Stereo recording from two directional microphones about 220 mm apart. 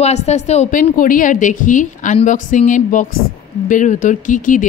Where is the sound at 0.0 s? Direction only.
30° left (ahead or behind).